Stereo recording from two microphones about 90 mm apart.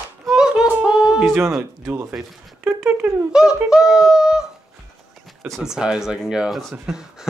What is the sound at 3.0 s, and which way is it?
Speech, 10° right (ahead or behind).